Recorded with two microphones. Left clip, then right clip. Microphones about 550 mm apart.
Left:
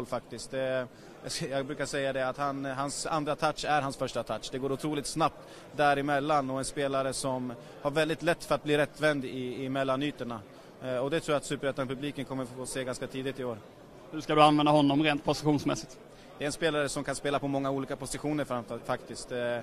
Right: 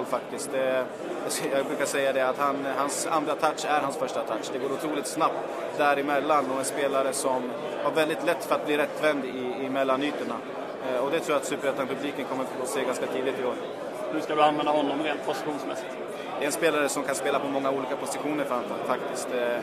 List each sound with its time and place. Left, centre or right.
0.1 s a man's voice: left
14.3 s a man's voice: left
16.3 s a man's voice: left